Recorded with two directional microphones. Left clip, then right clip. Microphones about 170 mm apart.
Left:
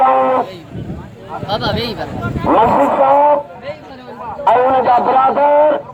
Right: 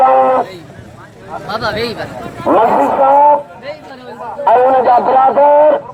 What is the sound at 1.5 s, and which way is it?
Speech, 60° left (ahead or behind).